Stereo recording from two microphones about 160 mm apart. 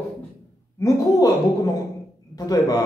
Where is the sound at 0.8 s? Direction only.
20° left (ahead or behind).